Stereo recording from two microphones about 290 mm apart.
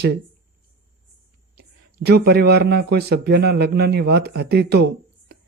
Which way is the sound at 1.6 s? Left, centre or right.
Right.